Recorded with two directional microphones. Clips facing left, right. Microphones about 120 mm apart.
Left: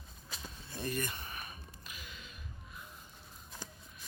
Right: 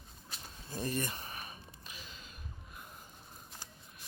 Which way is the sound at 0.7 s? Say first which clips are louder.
Right 1 dB; 35° right (ahead or behind).